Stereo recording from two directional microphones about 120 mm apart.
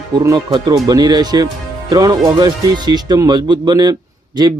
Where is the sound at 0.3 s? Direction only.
35° right (ahead or behind).